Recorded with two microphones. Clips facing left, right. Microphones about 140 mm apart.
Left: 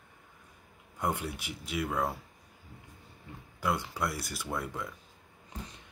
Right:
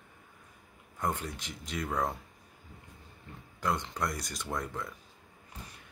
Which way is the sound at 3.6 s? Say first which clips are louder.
Even; 5° left (ahead or behind).